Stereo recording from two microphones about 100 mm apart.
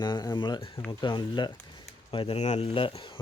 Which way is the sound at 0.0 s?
45° left (ahead or behind).